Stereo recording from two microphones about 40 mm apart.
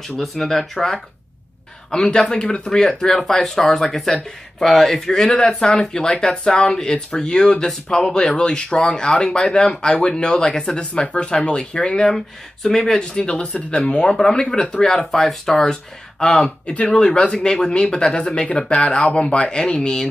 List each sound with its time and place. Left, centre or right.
0.2 s speech: centre; by 2.7 s left
2.7 s speech: centre
13.2 s speech: left
15.2 s speech: centre
16.2 s speech: left
16.6 s speech: left
16.9 s speech: left